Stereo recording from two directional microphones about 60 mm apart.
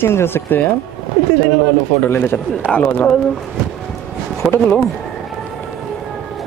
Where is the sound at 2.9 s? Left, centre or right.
Left.